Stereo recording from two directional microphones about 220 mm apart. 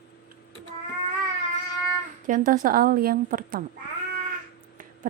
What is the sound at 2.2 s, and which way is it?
A woman's voice, 35° right (ahead or behind).